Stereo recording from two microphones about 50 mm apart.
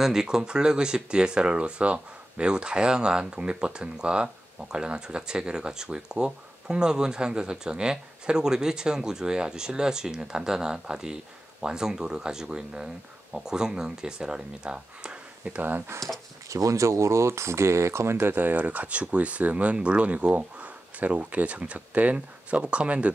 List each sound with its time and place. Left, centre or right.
0.0 s speech: centre
15.9 s speech: right
16.4 s speech: right